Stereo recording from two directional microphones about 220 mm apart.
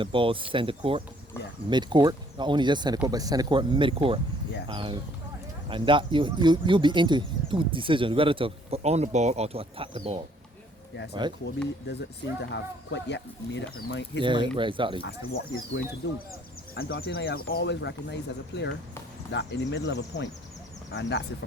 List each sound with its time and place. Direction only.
0.0 s speech: 25° right (ahead or behind)
11.9 s speech: 50° left (ahead or behind)
14.2 s speech: 20° right (ahead or behind)
15.0 s speech: 55° left (ahead or behind)